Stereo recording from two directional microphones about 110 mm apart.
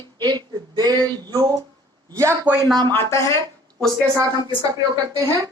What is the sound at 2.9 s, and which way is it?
Speech, 25° left (ahead or behind).